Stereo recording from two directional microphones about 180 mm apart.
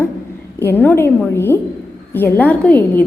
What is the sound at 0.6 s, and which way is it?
A woman's voice, 10° left (ahead or behind).